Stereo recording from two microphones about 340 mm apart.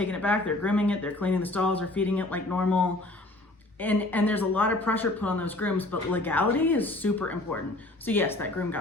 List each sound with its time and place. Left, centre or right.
0.0 s speech: centre